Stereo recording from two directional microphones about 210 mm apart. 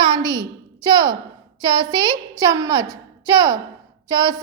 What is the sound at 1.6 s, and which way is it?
A woman's voice, 20° right (ahead or behind).